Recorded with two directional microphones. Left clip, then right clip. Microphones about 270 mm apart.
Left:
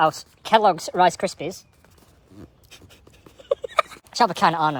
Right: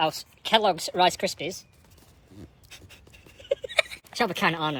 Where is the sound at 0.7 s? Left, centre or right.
Centre.